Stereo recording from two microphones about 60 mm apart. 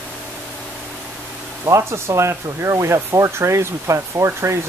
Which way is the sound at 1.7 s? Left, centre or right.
Right.